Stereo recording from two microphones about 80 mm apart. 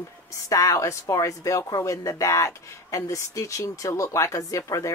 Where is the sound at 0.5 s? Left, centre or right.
Left.